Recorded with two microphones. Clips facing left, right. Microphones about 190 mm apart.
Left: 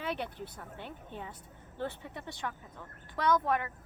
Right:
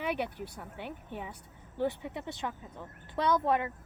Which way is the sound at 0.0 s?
10° right (ahead or behind).